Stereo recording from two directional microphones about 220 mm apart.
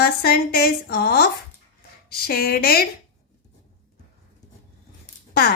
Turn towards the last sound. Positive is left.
turn(degrees=45)  # may be behind; listen again after turning